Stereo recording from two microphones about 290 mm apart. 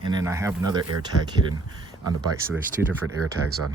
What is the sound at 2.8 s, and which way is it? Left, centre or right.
Speech, right.